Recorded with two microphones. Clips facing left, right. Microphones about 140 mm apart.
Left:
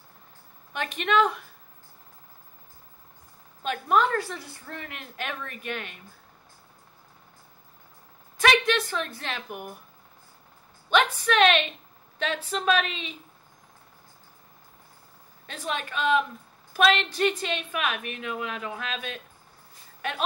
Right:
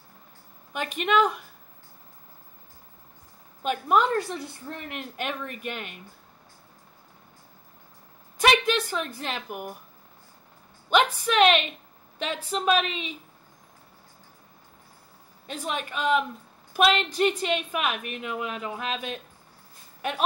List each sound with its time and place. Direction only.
0.7 s a woman's voice: 10° right (ahead or behind)
3.6 s a woman's voice: 15° right (ahead or behind)
8.5 s a woman's voice: 10° right (ahead or behind)
10.9 s a woman's voice: 15° right (ahead or behind)
15.5 s a woman's voice: 15° right (ahead or behind)